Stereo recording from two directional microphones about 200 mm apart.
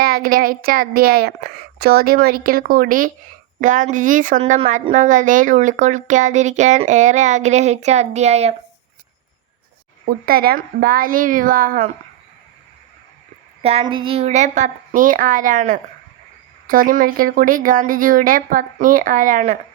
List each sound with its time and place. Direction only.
0.0 s a woman's voice: 45° right (ahead or behind)
10.2 s a woman's voice: 50° right (ahead or behind)
13.6 s a woman's voice: 30° right (ahead or behind)